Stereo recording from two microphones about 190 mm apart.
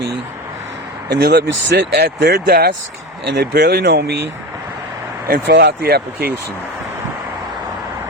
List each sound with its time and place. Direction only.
1.1 s speech: 60° right (ahead or behind)
5.3 s speech: 55° right (ahead or behind)